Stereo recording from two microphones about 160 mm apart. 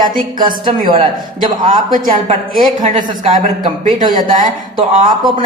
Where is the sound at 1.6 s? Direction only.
60° right (ahead or behind).